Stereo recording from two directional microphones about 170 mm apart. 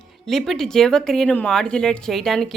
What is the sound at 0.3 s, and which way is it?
A woman's voice, centre (ahead or behind).